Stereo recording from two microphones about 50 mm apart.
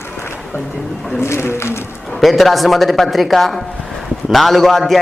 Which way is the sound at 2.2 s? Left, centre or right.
Centre.